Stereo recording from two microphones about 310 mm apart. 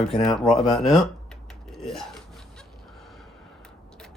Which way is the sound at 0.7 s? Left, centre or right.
Centre.